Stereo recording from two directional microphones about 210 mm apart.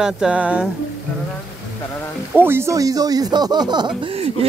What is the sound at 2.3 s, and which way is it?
Speech, 10° right (ahead or behind).